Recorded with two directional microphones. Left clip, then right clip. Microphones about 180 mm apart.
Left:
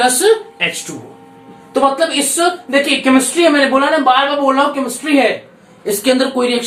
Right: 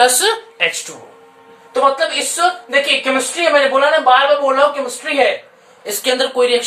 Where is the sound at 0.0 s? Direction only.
60° right (ahead or behind).